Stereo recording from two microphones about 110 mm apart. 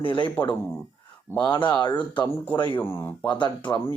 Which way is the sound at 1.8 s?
45° left (ahead or behind).